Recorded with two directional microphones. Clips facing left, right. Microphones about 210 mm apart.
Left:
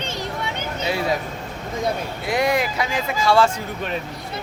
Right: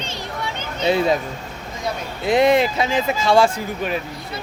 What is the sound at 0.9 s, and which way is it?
Speech, 25° right (ahead or behind).